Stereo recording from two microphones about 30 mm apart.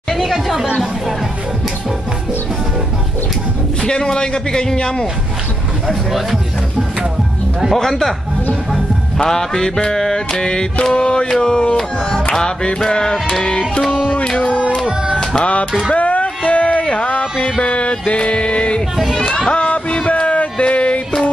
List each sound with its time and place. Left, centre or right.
0.2 s chatter: centre
3.8 s a man's voice: left
9.3 s a man's voice: centre
10.3 s music: left
12.3 s a man's voice: left
15.9 s a sound: left
17.6 s music: left
19.1 s a child's voice: centre
19.5 s music: left